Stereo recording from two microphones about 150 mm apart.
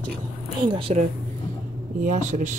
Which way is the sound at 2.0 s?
55° right (ahead or behind).